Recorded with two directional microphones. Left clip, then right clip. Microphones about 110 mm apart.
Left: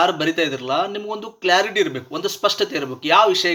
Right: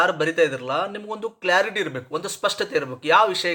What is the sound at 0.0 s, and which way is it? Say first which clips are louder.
Speech: left 1 dB; 35° right (ahead or behind).